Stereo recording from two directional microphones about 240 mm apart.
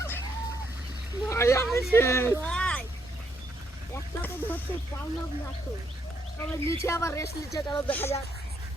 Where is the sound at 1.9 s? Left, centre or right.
Centre.